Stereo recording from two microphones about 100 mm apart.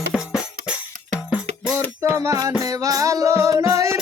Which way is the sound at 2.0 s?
30° right (ahead or behind).